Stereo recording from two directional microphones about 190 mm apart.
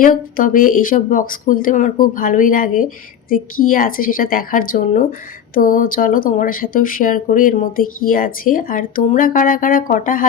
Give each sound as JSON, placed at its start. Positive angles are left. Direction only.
{"t": 0.0, "sound": "speech", "side_deg": 50}